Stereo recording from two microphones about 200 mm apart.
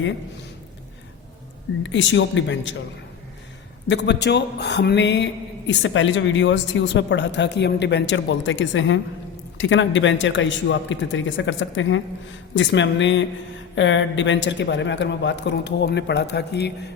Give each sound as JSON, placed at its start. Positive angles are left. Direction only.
{"t": 1.8, "sound": "speech", "side_deg": 65}
{"t": 3.8, "sound": "a man's voice", "side_deg": 60}